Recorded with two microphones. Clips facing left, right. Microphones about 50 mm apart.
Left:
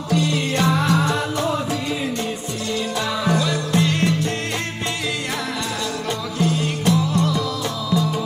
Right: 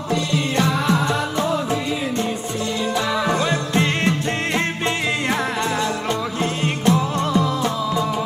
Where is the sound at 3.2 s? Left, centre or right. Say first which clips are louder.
Right 1 dB; right.